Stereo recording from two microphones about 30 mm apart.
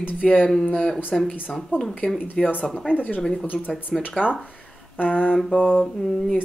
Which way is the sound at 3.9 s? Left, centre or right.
Right.